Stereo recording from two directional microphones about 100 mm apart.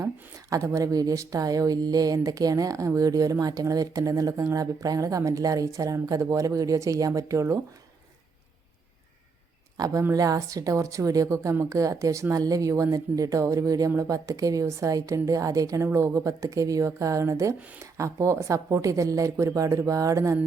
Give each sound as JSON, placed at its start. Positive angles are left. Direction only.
{"t": 0.0, "sound": "a woman's voice", "side_deg": -35}
{"t": 9.7, "sound": "a woman's voice", "side_deg": -40}